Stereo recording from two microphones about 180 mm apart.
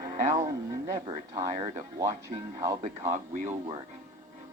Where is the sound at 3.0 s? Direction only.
40° right (ahead or behind).